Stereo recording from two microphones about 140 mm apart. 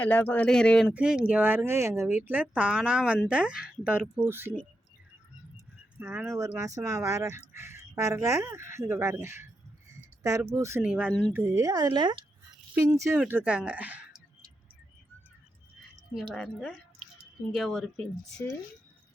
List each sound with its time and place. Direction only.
0.0 s speech: 10° left (ahead or behind)
0.9 s speech: 10° right (ahead or behind)
4.3 s speech: 15° right (ahead or behind)
6.0 s speech: 15° right (ahead or behind)
10.8 s speech: 10° right (ahead or behind); by 12.2 s 30° right (ahead or behind)
12.7 s speech: 10° right (ahead or behind)
16.3 s speech: centre (ahead or behind)